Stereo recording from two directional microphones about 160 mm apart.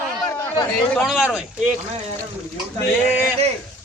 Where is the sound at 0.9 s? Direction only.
5° right (ahead or behind).